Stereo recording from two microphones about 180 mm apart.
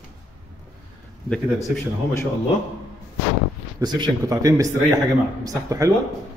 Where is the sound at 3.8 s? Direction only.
25° right (ahead or behind).